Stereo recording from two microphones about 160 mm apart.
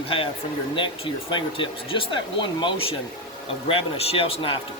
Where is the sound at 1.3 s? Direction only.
30° left (ahead or behind).